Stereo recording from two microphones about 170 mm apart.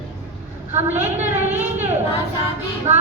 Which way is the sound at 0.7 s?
40° right (ahead or behind).